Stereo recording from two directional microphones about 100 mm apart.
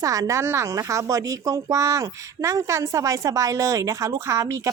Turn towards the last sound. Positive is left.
turn(degrees=-30)  # may be behind; listen again after turning